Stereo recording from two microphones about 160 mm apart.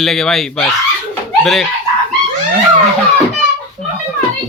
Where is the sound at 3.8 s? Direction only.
5° left (ahead or behind).